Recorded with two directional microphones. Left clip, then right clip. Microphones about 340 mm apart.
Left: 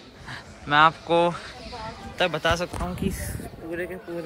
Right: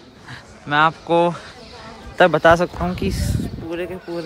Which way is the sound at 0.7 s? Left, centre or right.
Centre.